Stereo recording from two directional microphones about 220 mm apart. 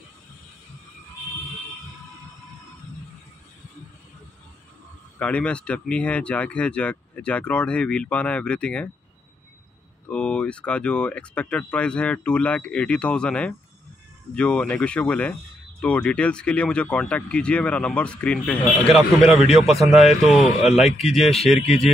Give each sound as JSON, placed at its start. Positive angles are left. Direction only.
{"t": 5.2, "sound": "speech", "side_deg": 5}
{"t": 10.0, "sound": "speech", "side_deg": 5}
{"t": 21.5, "sound": "speech", "side_deg": 30}